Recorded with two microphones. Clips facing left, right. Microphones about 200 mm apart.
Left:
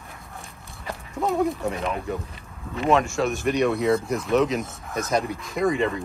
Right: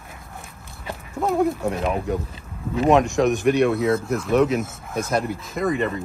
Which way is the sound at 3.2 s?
15° right (ahead or behind).